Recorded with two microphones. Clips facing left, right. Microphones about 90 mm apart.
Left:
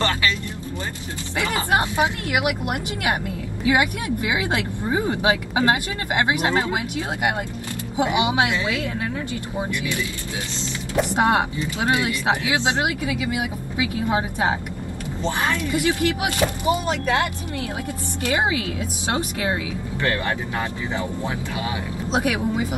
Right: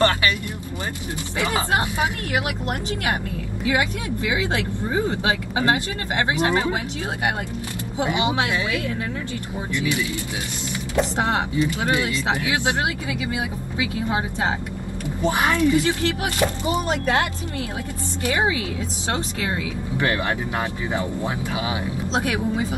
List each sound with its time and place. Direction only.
1.7 s speech: 20° left (ahead or behind)
8.0 s speech: 15° left (ahead or behind)
11.0 s speech: 15° left (ahead or behind)
13.0 s speech: 30° right (ahead or behind)
13.7 s speech: 20° left (ahead or behind)
15.2 s a woman's voice: 15° right (ahead or behind)
16.4 s speech: centre (ahead or behind)
16.9 s speech: 25° right (ahead or behind)
20.0 s speech: 20° right (ahead or behind)
22.1 s speech: 15° left (ahead or behind)